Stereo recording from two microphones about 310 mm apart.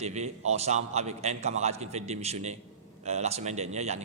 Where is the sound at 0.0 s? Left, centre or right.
Right.